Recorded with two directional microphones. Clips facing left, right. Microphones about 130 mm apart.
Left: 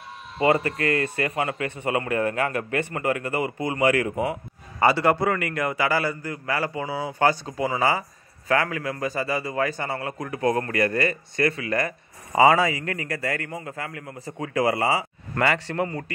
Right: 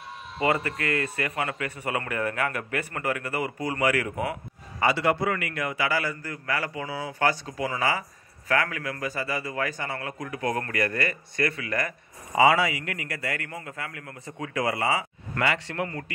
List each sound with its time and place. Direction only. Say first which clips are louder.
0.7 s speech: left 4 dB; 30° left (ahead or behind)
4.7 s a man's voice: left 4 dB; 40° left (ahead or behind)
12.4 s a man's voice: left 3 dB; 40° left (ahead or behind)